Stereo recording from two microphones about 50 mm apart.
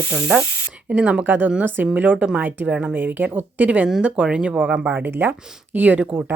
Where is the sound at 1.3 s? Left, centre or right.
Right.